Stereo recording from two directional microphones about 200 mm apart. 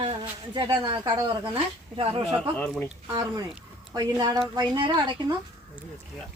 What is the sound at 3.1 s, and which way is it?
Speech, 20° right (ahead or behind).